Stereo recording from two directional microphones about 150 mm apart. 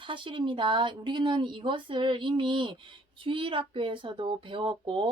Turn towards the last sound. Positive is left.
turn(degrees=-35)  # may be behind; listen again after turning